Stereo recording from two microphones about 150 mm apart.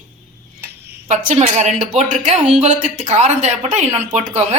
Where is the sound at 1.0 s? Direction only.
60° right (ahead or behind).